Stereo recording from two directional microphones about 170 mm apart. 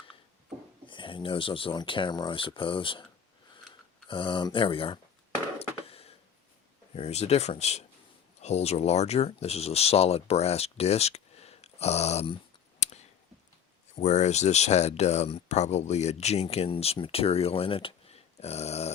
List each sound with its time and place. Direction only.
0.9 s speech: 30° left (ahead or behind)
4.1 s speech: 30° left (ahead or behind)
5.5 s a sound: 35° left (ahead or behind)
6.9 s speech: 40° left (ahead or behind)
12.8 s a sound: 40° left (ahead or behind)
13.9 s speech: 40° left (ahead or behind)